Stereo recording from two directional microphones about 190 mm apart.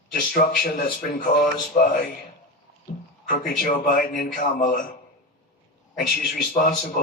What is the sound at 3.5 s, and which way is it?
Speech, 50° left (ahead or behind).